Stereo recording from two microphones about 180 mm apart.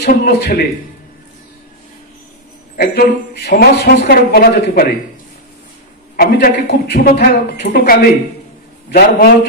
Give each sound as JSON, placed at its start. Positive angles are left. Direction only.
{"t": 0.0, "sound": "a woman's voice", "side_deg": 55}
{"t": 2.7, "sound": "a woman's voice", "side_deg": 60}
{"t": 6.1, "sound": "a woman's voice", "side_deg": 60}